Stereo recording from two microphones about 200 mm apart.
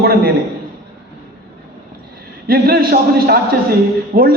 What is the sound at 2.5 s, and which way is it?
A man's voice, 50° right (ahead or behind).